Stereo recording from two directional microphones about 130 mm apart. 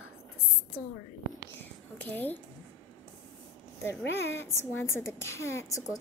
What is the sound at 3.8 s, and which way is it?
A woman's voice, 20° left (ahead or behind).